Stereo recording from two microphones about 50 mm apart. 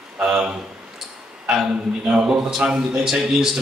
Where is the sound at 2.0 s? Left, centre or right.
Centre.